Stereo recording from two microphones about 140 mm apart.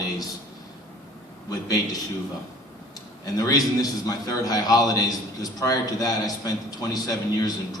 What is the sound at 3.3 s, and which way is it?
A man's voice, 25° left (ahead or behind).